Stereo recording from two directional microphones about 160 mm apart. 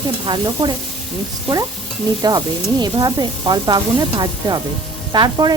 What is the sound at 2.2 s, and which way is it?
Speech, 25° right (ahead or behind).